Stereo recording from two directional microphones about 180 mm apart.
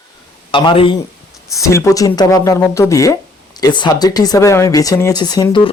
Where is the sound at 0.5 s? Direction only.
30° left (ahead or behind).